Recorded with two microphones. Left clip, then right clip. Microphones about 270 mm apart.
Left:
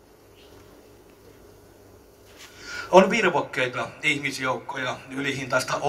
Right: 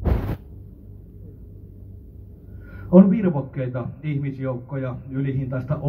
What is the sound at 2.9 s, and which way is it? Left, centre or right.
A man's voice, left.